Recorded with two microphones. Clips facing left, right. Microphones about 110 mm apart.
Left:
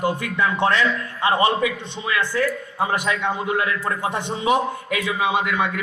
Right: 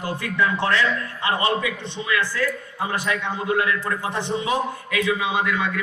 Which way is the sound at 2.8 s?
25° left (ahead or behind).